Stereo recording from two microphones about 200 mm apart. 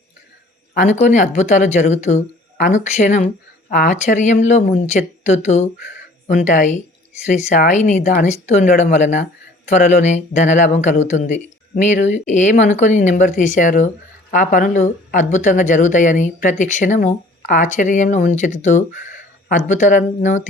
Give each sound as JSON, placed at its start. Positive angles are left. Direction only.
{"t": 0.7, "sound": "speech", "side_deg": 40}